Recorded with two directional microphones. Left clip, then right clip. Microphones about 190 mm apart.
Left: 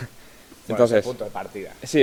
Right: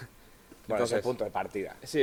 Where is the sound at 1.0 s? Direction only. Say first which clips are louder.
Left 2 dB; 40° right (ahead or behind).